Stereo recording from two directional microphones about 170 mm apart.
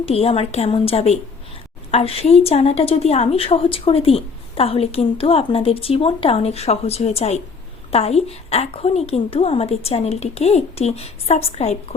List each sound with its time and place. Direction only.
0.0 s a woman's voice: 35° left (ahead or behind)